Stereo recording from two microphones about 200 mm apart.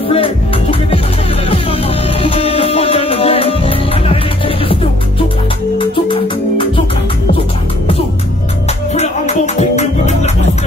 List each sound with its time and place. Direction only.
0.1 s music: 25° left (ahead or behind)
2.2 s music: 30° left (ahead or behind)
5.8 s music: 25° left (ahead or behind)
8.9 s music: 35° left (ahead or behind)